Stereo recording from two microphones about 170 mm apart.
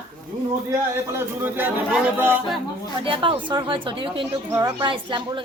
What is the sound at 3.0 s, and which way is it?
Speech, 30° right (ahead or behind).